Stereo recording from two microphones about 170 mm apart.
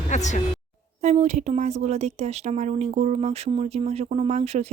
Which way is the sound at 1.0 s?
40° right (ahead or behind).